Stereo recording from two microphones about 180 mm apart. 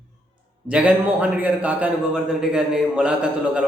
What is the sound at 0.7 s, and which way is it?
A man's voice, 5° right (ahead or behind).